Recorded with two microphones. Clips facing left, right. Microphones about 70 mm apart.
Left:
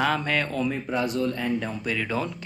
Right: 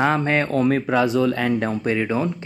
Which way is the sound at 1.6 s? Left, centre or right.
Right.